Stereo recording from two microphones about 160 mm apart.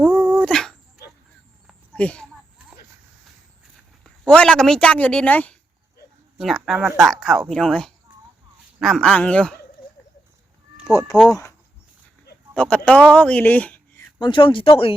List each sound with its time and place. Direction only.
0.0 s dog: 5° right (ahead or behind)
0.4 s dog: 5° left (ahead or behind)
2.0 s speech: 5° left (ahead or behind)
4.0 s speech: 5° left (ahead or behind)
6.3 s speech: centre (ahead or behind)
11.1 s speech: 5° left (ahead or behind)
12.5 s speech: 5° left (ahead or behind)
14.2 s speech: 30° left (ahead or behind)